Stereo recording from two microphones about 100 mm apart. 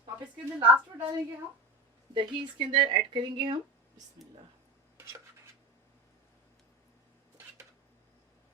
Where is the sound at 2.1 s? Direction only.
55° right (ahead or behind).